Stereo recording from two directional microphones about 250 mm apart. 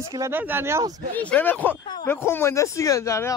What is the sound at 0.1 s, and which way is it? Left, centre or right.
Speech, centre.